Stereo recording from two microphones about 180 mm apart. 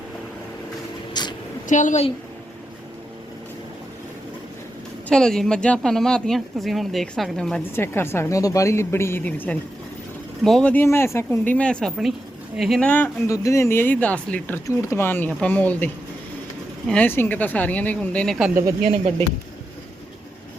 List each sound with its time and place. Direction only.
1.2 s a sound: 25° left (ahead or behind)
1.6 s a woman's voice: 45° left (ahead or behind)
5.0 s speech: 5° left (ahead or behind)